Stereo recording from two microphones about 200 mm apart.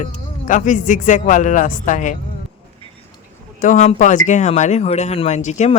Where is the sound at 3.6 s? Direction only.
40° left (ahead or behind).